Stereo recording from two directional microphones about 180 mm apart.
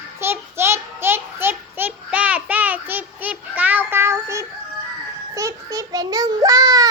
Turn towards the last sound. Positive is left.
turn(degrees=-20)  # may be behind; listen again after turning